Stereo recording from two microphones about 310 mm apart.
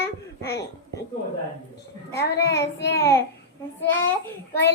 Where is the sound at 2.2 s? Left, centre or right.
Left.